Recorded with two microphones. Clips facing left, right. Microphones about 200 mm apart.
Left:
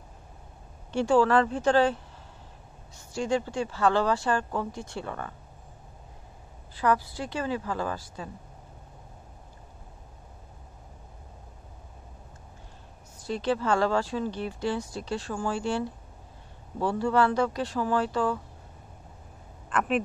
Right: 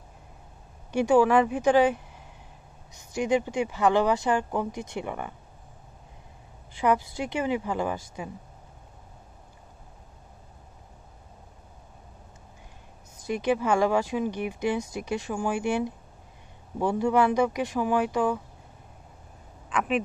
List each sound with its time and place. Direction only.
0.9 s speech: 15° right (ahead or behind)
6.8 s speech: 20° right (ahead or behind)
13.3 s speech: 15° right (ahead or behind)
19.7 s speech: centre (ahead or behind)